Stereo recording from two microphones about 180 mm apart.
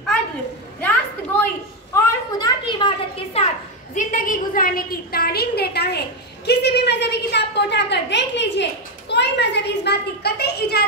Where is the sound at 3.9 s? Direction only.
45° left (ahead or behind).